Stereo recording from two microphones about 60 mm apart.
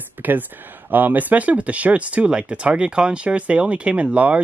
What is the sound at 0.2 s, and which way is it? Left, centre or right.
Speech, right.